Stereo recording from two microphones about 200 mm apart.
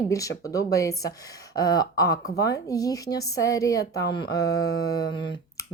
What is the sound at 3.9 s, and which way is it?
Speech, 55° left (ahead or behind).